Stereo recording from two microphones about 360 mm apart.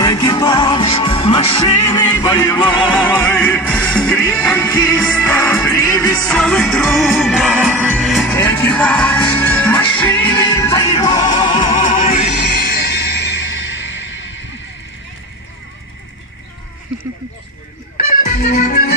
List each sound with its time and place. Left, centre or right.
0.0 s music: centre; by 14.3 s left
18.1 s music: left